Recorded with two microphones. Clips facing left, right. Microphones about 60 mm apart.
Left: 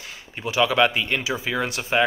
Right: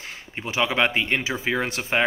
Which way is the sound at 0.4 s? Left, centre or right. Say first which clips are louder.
Left 3 dB; right.